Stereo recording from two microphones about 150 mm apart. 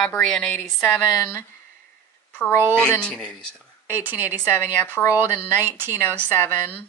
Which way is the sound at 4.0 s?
10° right (ahead or behind).